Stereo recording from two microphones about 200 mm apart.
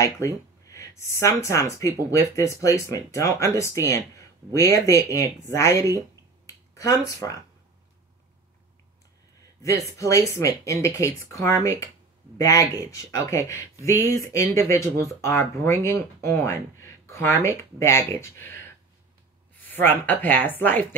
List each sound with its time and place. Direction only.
0.0 s speech: 15° left (ahead or behind)
9.6 s a woman's voice: 15° left (ahead or behind)